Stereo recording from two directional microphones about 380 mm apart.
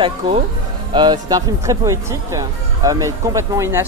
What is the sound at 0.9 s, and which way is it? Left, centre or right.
Speech, centre.